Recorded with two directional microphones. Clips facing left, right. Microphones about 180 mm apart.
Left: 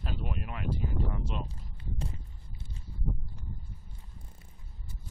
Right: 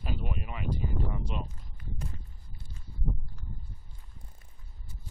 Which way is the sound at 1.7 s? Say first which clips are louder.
Left 2 dB; 30° left (ahead or behind).